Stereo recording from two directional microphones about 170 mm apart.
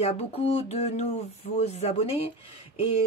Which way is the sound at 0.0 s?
35° left (ahead or behind).